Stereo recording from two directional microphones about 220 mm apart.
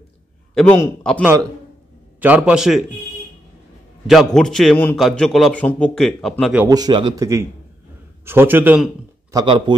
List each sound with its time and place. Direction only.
0.6 s a man's voice: 5° left (ahead or behind)
1.2 s a man's voice: 15° right (ahead or behind)
4.1 s a man's voice: centre (ahead or behind)
6.6 s a man's voice: 15° right (ahead or behind)
9.4 s speech: 20° right (ahead or behind)